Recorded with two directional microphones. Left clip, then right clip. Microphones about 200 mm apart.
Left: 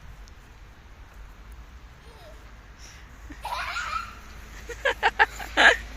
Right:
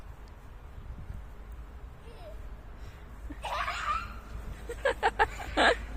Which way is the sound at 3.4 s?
35° right (ahead or behind).